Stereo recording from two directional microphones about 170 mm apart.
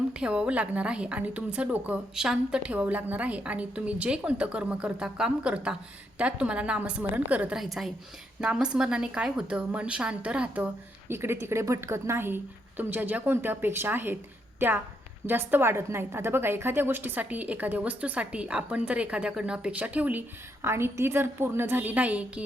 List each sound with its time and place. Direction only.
0.1 s a woman's voice: 5° right (ahead or behind)